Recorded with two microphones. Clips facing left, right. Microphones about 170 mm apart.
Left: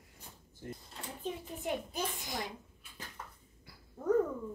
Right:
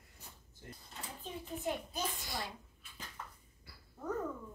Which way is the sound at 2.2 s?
20° left (ahead or behind).